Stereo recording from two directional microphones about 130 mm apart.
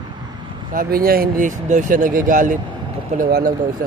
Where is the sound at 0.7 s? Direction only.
90° right.